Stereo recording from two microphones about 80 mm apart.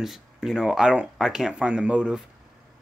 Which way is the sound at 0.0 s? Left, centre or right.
Centre.